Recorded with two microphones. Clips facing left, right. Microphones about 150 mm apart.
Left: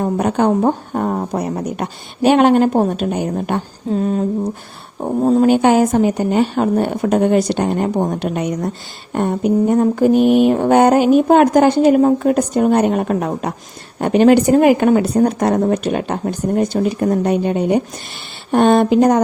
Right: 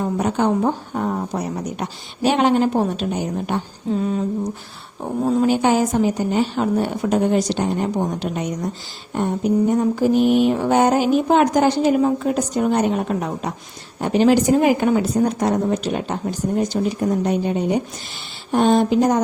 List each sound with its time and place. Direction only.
0.0 s speech: 55° left (ahead or behind)
5.0 s mantra: 45° left (ahead or behind); by 19.2 s 65° left (ahead or behind)